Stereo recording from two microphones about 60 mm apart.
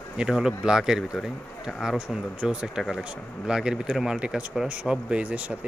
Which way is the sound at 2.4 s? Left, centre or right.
Right.